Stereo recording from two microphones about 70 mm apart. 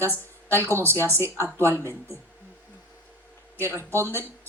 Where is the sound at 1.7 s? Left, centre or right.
Left.